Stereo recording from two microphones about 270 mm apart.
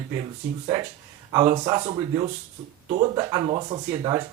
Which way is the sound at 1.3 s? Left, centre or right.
Centre.